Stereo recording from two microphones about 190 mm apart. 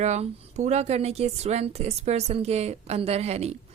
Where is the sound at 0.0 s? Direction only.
35° right (ahead or behind).